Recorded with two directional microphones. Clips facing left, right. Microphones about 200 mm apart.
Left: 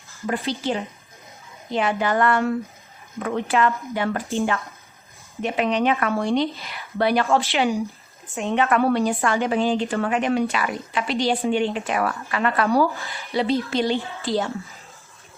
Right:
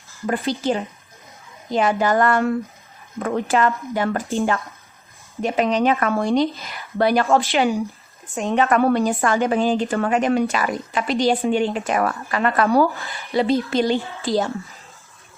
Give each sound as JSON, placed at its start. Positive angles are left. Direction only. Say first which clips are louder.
{"t": 0.3, "sound": "a woman's voice", "louder": "right 3 dB", "side_deg": -45}